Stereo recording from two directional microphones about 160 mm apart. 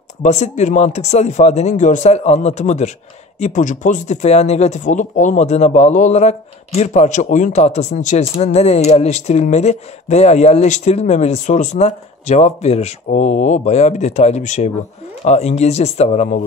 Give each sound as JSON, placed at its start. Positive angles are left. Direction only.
{"t": 0.2, "sound": "speech", "side_deg": 45}